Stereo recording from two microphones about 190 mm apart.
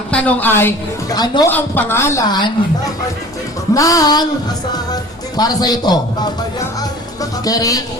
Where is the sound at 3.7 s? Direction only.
20° left (ahead or behind).